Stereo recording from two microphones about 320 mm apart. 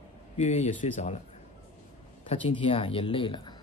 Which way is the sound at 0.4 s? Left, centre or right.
Left.